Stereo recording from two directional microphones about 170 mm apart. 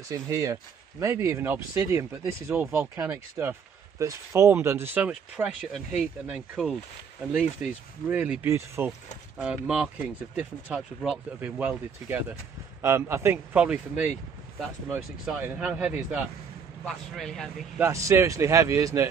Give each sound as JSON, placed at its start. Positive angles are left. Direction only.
{"t": 0.1, "sound": "speech", "side_deg": -20}
{"t": 16.8, "sound": "speech", "side_deg": 0}
{"t": 17.7, "sound": "speech", "side_deg": -15}